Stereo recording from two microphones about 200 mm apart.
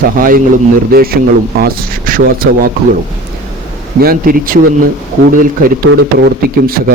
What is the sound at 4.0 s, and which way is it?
Speech, 45° right (ahead or behind).